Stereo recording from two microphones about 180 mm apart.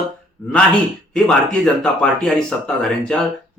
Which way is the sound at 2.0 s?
5° left (ahead or behind).